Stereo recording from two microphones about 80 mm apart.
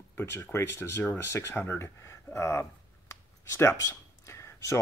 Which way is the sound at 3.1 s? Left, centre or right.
Left.